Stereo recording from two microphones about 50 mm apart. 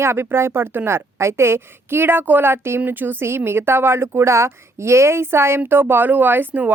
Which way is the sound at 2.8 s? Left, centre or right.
Right.